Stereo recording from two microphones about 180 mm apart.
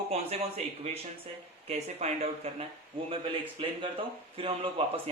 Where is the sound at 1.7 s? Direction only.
40° right (ahead or behind).